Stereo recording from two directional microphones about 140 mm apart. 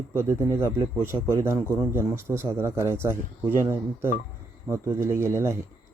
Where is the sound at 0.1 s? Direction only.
20° right (ahead or behind).